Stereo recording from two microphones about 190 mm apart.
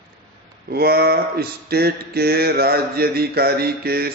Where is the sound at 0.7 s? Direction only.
55° right (ahead or behind).